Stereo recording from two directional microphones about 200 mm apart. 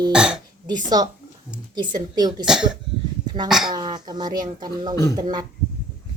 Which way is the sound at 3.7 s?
20° right (ahead or behind).